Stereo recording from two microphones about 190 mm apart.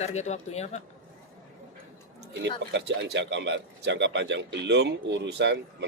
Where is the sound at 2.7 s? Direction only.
65° right (ahead or behind).